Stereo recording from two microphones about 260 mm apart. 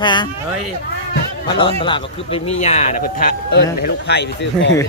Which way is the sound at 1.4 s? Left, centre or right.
Centre.